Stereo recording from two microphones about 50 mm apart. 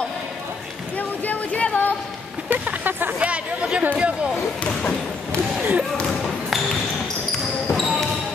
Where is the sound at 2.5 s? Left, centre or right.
Right.